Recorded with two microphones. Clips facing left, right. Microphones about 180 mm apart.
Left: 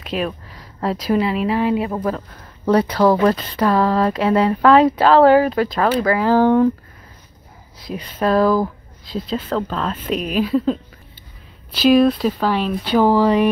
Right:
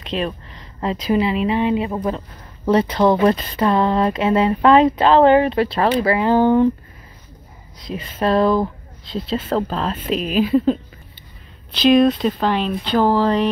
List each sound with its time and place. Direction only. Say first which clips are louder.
0.0 s speech: even; 5° left (ahead or behind)
7.8 s speech: even; centre (ahead or behind)
9.5 s speech: right 2 dB; 30° right (ahead or behind)
10.0 s speech: right 2 dB; 5° left (ahead or behind)